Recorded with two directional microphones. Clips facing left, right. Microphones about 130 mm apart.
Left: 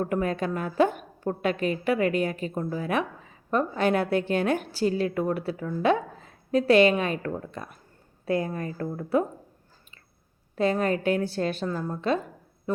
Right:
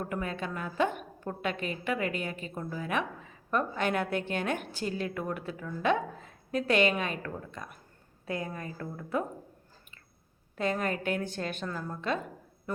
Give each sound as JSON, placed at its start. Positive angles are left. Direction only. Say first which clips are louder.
{"t": 0.0, "sound": "a woman's voice", "louder": "left 8 dB", "side_deg": 40}
{"t": 10.5, "sound": "a woman's voice", "louder": "left 6 dB", "side_deg": 35}